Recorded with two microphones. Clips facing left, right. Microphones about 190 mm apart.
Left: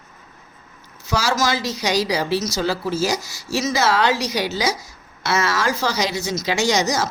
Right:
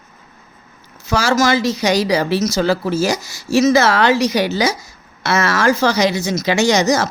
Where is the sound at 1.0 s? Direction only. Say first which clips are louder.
Right 5 dB; 50° right (ahead or behind).